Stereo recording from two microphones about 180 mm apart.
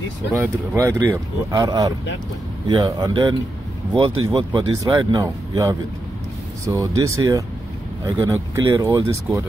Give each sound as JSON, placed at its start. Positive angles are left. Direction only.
{"t": 0.4, "sound": "speech", "side_deg": -15}